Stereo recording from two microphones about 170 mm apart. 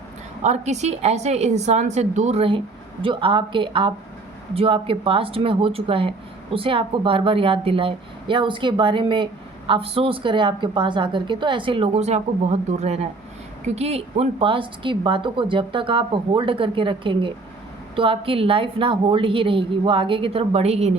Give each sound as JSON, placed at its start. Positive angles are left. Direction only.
{"t": 0.4, "sound": "a woman's voice", "side_deg": -40}